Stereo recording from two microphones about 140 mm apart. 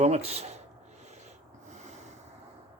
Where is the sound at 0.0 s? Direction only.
50° right (ahead or behind).